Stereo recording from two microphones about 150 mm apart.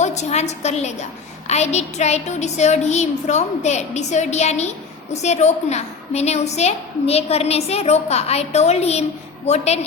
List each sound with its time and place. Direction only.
0.0 s a woman's voice: 50° left (ahead or behind)